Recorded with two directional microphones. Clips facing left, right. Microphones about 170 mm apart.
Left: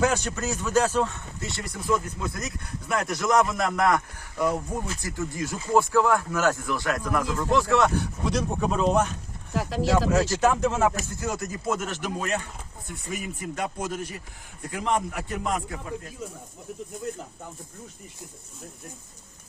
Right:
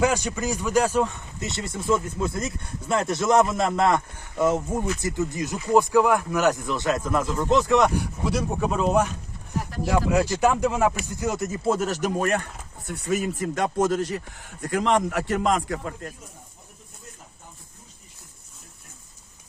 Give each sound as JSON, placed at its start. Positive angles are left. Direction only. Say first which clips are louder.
{"t": 0.0, "sound": "speech", "louder": "right 2 dB", "side_deg": -10}
{"t": 9.5, "sound": "speech", "louder": "left 3 dB", "side_deg": 90}
{"t": 10.1, "sound": "speech", "louder": "right 1 dB", "side_deg": -15}
{"t": 12.9, "sound": "speech", "louder": "right 9 dB", "side_deg": -85}